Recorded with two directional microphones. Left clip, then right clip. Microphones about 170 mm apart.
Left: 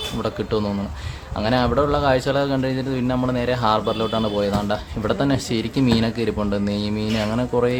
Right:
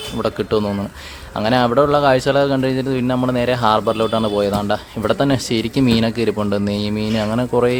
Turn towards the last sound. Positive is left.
turn(degrees=-35)  # may be behind; listen again after turning